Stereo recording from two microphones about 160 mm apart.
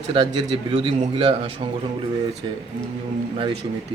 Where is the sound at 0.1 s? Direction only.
30° right (ahead or behind).